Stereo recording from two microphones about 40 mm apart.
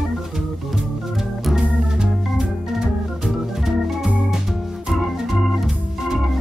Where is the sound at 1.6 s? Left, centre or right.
Centre.